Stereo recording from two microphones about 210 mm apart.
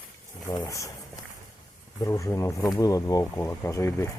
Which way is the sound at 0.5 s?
15° left (ahead or behind).